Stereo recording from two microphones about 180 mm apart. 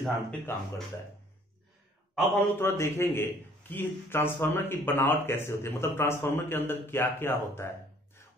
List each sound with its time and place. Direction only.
0.0 s speech: 5° left (ahead or behind)
2.6 s a man's voice: 15° left (ahead or behind)